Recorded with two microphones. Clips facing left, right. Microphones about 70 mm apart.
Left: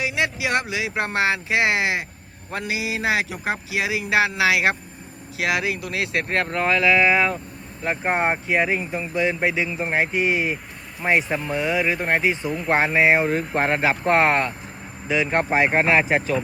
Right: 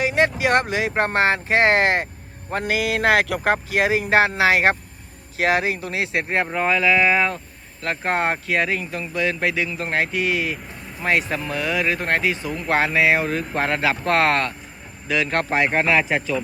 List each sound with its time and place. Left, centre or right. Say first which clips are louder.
0.0 s speech: right 5 dB; right
6.2 s speech: right 1 dB; centre
6.6 s speech: even; centre; by 10.5 s left
11.0 s speech: left 1 dB; centre
12.7 s speech: even; left; by 15.7 s centre
15.7 s speech: left 1 dB; left